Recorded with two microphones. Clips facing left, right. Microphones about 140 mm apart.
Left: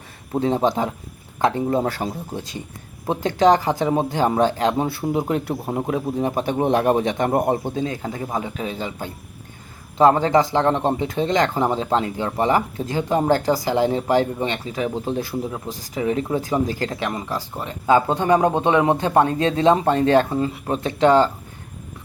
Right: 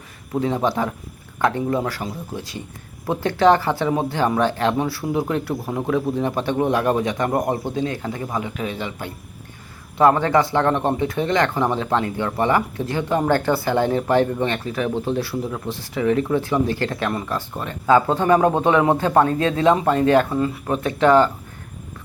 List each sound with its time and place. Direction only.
0.3 s a man's voice: 25° left (ahead or behind)
2.3 s a man's voice: 20° left (ahead or behind)
13.2 s a man's voice: 35° left (ahead or behind)
14.4 s speech: 20° left (ahead or behind)